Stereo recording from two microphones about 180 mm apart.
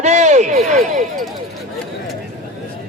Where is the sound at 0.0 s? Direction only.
40° right (ahead or behind).